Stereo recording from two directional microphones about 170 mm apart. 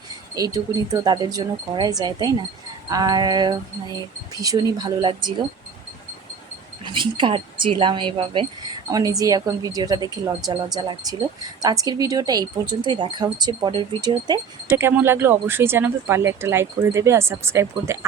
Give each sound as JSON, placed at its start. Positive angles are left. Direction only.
{"t": 0.3, "sound": "speech", "side_deg": -20}
{"t": 6.8, "sound": "speech", "side_deg": -30}
{"t": 14.8, "sound": "speech", "side_deg": -15}